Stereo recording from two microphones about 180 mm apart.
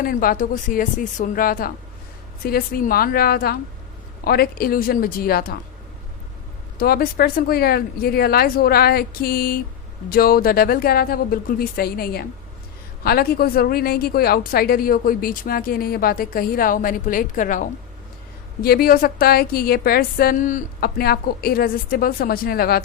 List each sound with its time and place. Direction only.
0.0 s a woman's voice: 55° left (ahead or behind)
6.7 s a woman's voice: 55° left (ahead or behind)